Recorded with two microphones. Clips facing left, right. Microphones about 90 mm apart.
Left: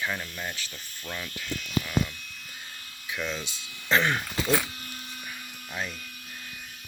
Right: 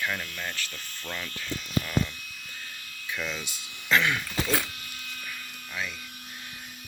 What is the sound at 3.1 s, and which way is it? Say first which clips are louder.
Speech: left 1 dB; 10° left (ahead or behind).